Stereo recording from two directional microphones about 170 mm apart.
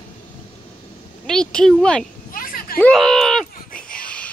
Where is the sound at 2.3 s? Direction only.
55° left (ahead or behind).